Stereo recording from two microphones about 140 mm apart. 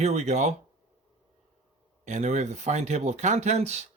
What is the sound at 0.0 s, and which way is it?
Speech, 50° right (ahead or behind).